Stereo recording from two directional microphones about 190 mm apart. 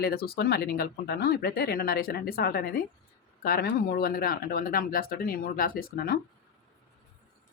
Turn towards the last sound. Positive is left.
turn(degrees=50)  # may be behind; listen again after turning